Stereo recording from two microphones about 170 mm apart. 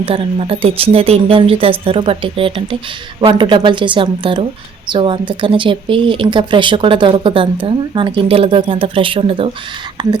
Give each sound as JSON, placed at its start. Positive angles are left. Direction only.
{"t": 0.0, "sound": "a woman's voice", "side_deg": -35}